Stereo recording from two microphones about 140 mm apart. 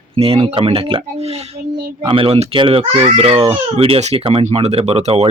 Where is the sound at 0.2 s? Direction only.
45° right (ahead or behind).